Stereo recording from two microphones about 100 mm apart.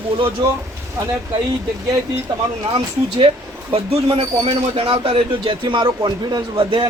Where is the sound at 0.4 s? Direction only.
40° right (ahead or behind).